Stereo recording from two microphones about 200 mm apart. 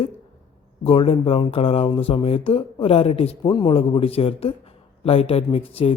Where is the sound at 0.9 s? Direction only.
30° left (ahead or behind).